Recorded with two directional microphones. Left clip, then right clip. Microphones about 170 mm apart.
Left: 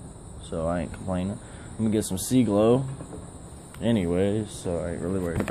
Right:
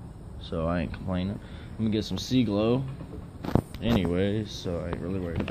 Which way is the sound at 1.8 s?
30° left (ahead or behind).